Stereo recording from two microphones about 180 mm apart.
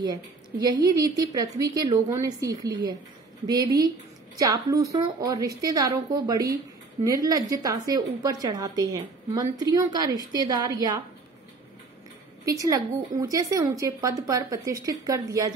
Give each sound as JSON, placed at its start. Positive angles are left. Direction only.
{"t": 0.0, "sound": "a woman's voice", "side_deg": -20}
{"t": 12.4, "sound": "a woman's voice", "side_deg": -20}